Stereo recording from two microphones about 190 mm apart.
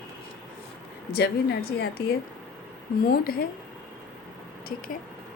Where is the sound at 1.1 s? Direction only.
55° left (ahead or behind).